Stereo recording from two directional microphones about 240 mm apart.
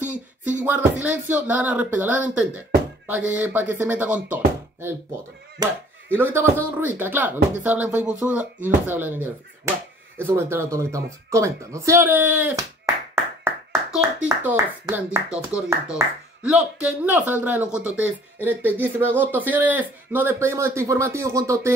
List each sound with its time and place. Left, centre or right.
0.0 s a sound: right
0.7 s speech: centre
5.6 s speech: centre